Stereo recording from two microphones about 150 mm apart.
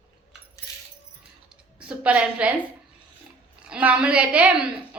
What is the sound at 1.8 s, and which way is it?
Speech, 5° right (ahead or behind).